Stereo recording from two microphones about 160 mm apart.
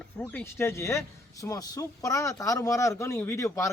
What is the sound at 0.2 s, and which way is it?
Speech, 10° left (ahead or behind).